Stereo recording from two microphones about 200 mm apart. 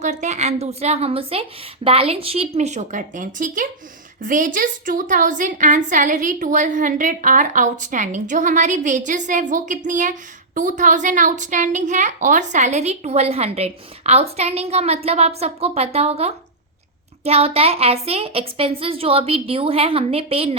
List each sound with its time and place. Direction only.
0.0 s a woman's voice: 35° right (ahead or behind)